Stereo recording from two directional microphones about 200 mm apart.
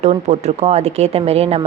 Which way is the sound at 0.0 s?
35° right (ahead or behind).